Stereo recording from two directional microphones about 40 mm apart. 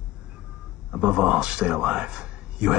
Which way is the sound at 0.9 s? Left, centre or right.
Right.